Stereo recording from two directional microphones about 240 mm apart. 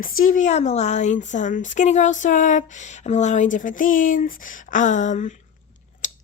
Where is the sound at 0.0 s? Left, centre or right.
Left.